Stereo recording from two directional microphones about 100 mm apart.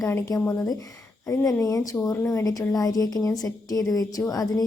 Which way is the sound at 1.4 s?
35° left (ahead or behind).